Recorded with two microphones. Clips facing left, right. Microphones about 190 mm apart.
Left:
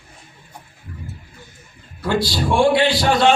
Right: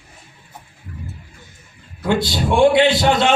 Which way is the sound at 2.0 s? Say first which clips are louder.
Right 1 dB; 20° right (ahead or behind).